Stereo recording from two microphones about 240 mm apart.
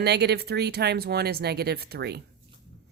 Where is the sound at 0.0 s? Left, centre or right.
Right.